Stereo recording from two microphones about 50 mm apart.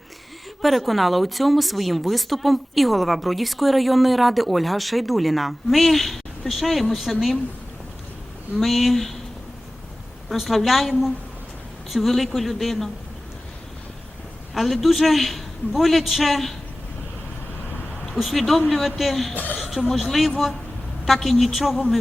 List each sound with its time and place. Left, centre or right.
0.6 s speech: centre
8.5 s speech: centre
10.2 s speech: centre
14.5 s speech: centre
18.0 s speech: centre
19.3 s a woman's voice: left
19.9 s speech: centre